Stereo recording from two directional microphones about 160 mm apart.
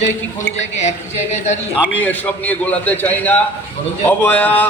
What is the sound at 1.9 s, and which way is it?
Speech, 10° left (ahead or behind).